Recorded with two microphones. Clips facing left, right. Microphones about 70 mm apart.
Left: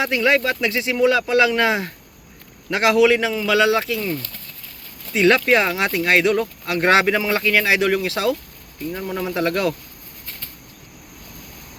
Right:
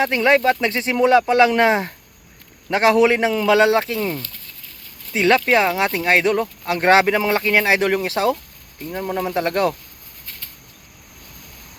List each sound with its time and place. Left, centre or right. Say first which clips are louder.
0.0 s speech: right 3 dB; right
5.1 s speech: even; right